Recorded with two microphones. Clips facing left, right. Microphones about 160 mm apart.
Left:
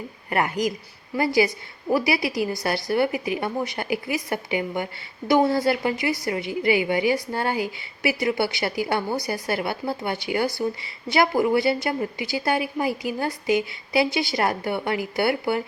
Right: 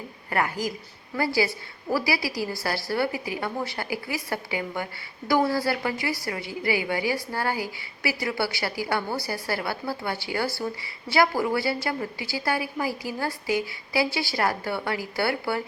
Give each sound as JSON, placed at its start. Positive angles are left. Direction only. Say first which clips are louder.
{"t": 0.3, "sound": "a woman's voice", "louder": "left 3 dB", "side_deg": 20}